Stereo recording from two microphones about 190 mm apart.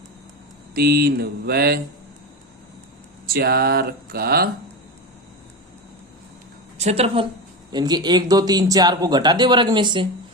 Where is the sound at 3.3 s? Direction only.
55° right (ahead or behind).